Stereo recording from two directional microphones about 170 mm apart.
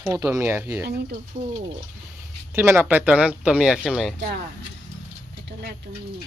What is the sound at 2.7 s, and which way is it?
Speech, 10° right (ahead or behind).